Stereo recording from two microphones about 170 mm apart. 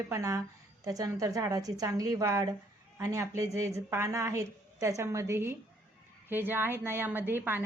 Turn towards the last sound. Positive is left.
turn(degrees=-15)  # may be behind; listen again after turning